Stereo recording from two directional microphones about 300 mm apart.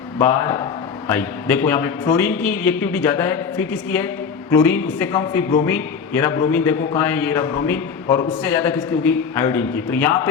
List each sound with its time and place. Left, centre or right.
0.2 s a man's voice: centre
8.0 s a man's voice: centre
8.6 s a man's voice: centre